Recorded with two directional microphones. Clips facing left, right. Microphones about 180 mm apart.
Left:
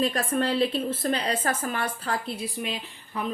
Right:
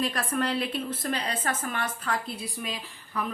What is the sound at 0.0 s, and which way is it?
A woman's voice, 30° left (ahead or behind).